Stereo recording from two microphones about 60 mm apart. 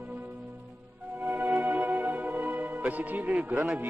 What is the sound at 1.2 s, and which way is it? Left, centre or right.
Music, right.